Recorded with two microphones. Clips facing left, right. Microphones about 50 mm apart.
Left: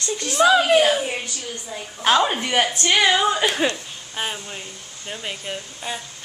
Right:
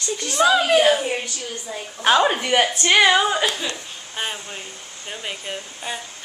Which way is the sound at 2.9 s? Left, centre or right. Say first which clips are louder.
Right 3 dB; centre.